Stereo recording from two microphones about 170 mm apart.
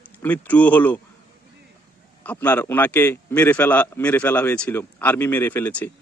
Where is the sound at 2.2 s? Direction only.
10° left (ahead or behind).